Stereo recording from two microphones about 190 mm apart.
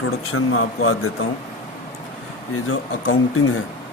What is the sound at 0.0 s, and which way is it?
Speech, 90° left.